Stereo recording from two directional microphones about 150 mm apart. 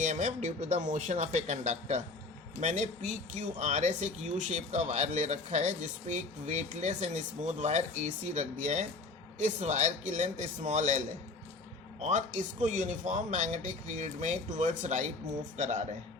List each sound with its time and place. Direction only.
0.0 s speech: 50° right (ahead or behind)